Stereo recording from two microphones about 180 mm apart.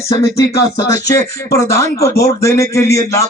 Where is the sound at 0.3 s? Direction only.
20° left (ahead or behind).